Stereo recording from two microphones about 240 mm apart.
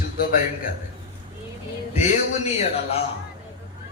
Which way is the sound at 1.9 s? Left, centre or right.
Left.